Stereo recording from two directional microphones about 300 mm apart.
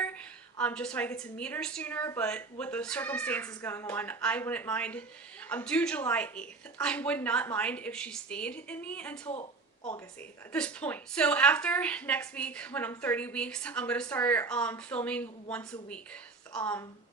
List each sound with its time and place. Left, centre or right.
0.0 s a woman's voice: centre
9.3 s a sound: left
10.5 s a woman's voice: centre